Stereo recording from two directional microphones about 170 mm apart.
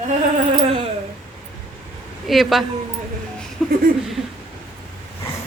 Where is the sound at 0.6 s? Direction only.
35° right (ahead or behind).